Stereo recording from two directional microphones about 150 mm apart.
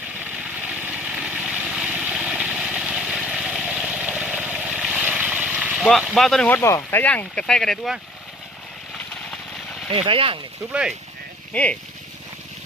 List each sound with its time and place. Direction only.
0.7 s vehicle: 10° right (ahead or behind)
6.6 s speech: 20° left (ahead or behind)
9.9 s speech: 40° right (ahead or behind)
10.7 s speech: 5° right (ahead or behind)
11.5 s speech: 10° left (ahead or behind)